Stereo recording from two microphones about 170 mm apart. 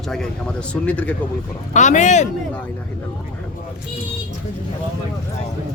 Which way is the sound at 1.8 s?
45° left (ahead or behind).